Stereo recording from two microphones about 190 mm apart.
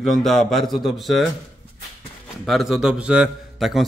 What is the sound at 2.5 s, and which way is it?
A man's voice, centre (ahead or behind).